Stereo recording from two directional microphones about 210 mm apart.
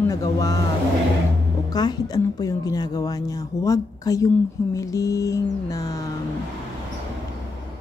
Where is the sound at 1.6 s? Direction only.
20° left (ahead or behind).